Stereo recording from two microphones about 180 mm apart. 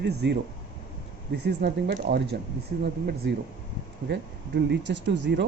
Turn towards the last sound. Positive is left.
turn(degrees=-75)  # may be behind; listen again after turning